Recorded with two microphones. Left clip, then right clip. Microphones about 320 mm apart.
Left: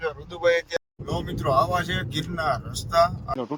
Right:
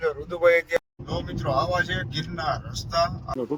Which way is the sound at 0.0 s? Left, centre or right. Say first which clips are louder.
Right 3 dB; centre.